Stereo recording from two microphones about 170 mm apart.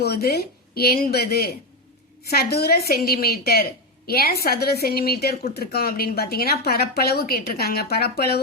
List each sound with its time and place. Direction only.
0.0 s a woman's voice: 70° left (ahead or behind)